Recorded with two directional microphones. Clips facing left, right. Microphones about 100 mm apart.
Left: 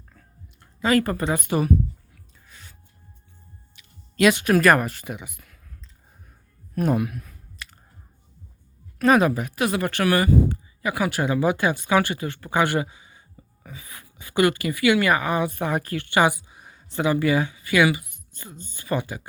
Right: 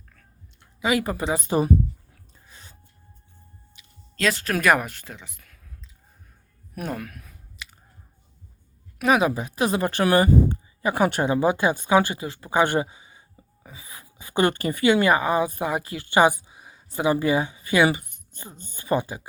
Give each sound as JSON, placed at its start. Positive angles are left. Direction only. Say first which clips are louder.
{"t": 0.8, "sound": "speech", "louder": "left 3 dB", "side_deg": -10}
{"t": 1.2, "sound": "a woman's voice", "louder": "even", "side_deg": -25}
{"t": 2.5, "sound": "gasp", "louder": "even", "side_deg": -25}
{"t": 4.2, "sound": "speech", "louder": "left 6 dB", "side_deg": 10}
{"t": 5.0, "sound": "speech", "louder": "left 7 dB", "side_deg": 15}
{"t": 6.8, "sound": "speech", "louder": "left 9 dB", "side_deg": 10}
{"t": 7.2, "sound": "clicking", "louder": "left 3 dB", "side_deg": 0}
{"t": 9.0, "sound": "speech", "louder": "left 3 dB", "side_deg": -5}
{"t": 9.2, "sound": "a woman's voice", "louder": "even", "side_deg": -20}
{"t": 11.3, "sound": "a woman's voice", "louder": "right 1 dB", "side_deg": -20}
{"t": 16.5, "sound": "a sound", "louder": "even", "side_deg": -15}
{"t": 17.1, "sound": "a woman's voice", "louder": "even", "side_deg": -20}